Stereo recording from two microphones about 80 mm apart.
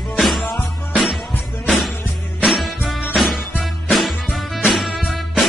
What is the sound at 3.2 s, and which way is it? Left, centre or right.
Music, centre.